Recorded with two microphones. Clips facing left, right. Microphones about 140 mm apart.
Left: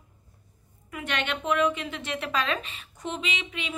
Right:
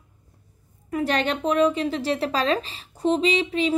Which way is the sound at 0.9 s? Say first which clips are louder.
Right 8 dB; 35° right (ahead or behind).